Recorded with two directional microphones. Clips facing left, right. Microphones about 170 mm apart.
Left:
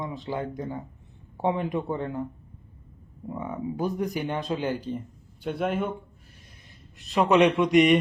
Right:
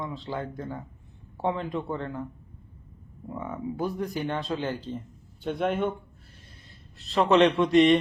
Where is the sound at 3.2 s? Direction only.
15° left (ahead or behind).